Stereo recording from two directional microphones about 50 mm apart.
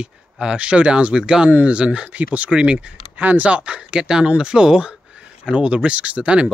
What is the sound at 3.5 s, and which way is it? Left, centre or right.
Speech, right.